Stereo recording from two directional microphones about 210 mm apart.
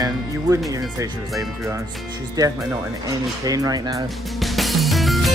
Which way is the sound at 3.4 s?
15° right (ahead or behind).